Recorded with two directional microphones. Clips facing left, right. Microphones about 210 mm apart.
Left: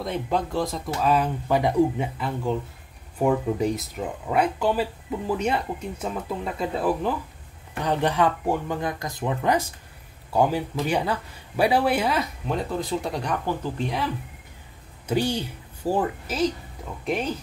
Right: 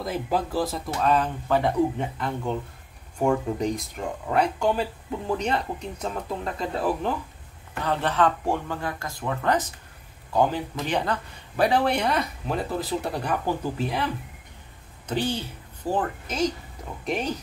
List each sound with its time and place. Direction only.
0.0 s speech: 5° right (ahead or behind)
7.8 s speech: 15° left (ahead or behind); by 14.1 s centre (ahead or behind)
15.0 s a woman's voice: 10° left (ahead or behind)